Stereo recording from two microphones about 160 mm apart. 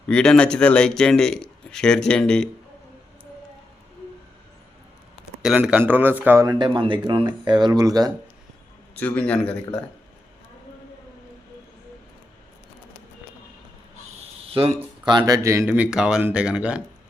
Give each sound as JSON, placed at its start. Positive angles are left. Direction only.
{"t": 0.1, "sound": "speech", "side_deg": 5}
{"t": 5.4, "sound": "speech", "side_deg": -5}
{"t": 9.0, "sound": "a man's voice", "side_deg": 10}
{"t": 14.5, "sound": "speech", "side_deg": -35}